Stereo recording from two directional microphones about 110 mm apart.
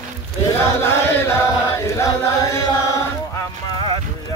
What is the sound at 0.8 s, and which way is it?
Chant, 25° left (ahead or behind).